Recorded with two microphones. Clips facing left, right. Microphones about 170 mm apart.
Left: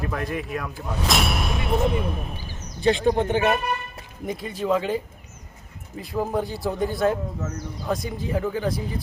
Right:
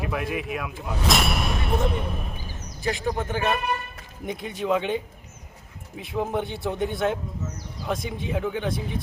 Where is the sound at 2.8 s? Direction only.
30° left (ahead or behind).